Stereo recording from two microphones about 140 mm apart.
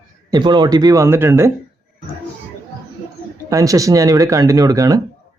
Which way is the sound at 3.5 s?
25° right (ahead or behind).